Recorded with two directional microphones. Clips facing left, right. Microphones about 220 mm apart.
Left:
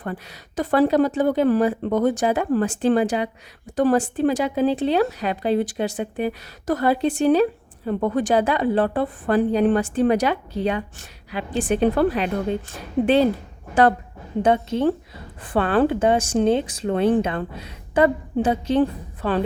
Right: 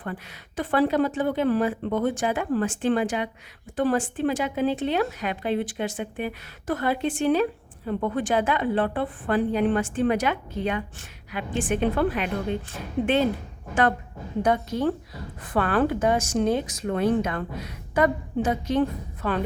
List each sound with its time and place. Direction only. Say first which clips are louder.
0.0 s a woman's voice: left 4 dB; 40° left (ahead or behind)
14.4 s a woman's voice: left 4 dB; 25° left (ahead or behind)